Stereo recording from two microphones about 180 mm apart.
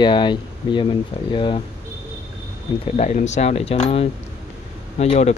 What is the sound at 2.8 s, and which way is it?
Speech, 40° left (ahead or behind).